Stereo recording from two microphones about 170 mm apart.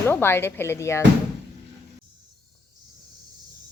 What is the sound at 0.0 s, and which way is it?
Frying, 15° left (ahead or behind).